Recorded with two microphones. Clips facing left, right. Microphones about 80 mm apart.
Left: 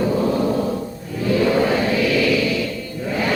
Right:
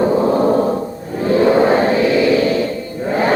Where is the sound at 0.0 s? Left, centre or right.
Right.